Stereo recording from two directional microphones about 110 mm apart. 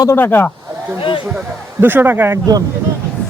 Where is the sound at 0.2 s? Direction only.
20° left (ahead or behind).